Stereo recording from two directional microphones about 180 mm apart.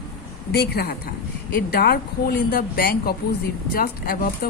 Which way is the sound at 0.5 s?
60° left (ahead or behind).